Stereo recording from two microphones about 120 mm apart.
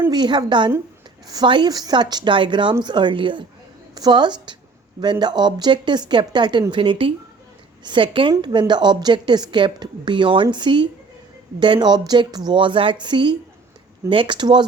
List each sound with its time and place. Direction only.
0.1 s a woman's voice: 35° right (ahead or behind)